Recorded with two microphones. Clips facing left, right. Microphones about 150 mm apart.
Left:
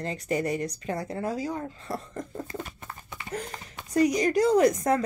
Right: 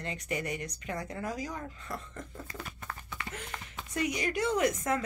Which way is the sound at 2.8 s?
15° left (ahead or behind).